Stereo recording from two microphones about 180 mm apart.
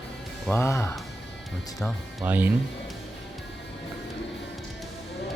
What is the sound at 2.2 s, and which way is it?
Speech, 10° right (ahead or behind).